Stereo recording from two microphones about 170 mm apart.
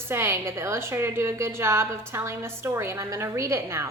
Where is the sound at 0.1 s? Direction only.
15° right (ahead or behind).